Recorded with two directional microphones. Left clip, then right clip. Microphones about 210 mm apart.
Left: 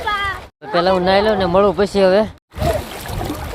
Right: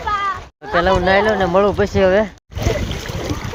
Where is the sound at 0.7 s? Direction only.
10° left (ahead or behind).